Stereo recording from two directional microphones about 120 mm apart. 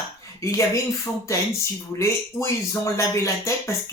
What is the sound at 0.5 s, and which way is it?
Speech, 25° left (ahead or behind).